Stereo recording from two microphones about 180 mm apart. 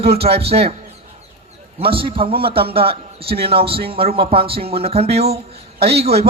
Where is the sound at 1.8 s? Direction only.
30° right (ahead or behind).